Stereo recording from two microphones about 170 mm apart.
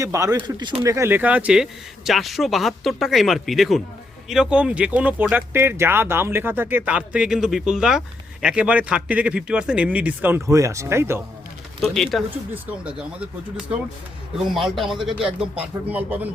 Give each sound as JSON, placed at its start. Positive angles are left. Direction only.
{"t": 0.0, "sound": "speech", "side_deg": -20}
{"t": 0.8, "sound": "speech", "side_deg": -15}
{"t": 11.8, "sound": "speech", "side_deg": 0}